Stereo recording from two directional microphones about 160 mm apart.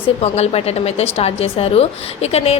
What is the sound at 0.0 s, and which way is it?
A woman's voice, 40° left (ahead or behind).